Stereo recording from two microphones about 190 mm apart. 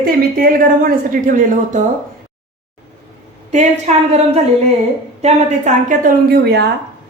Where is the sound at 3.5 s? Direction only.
35° right (ahead or behind); by 6.7 s 60° right (ahead or behind).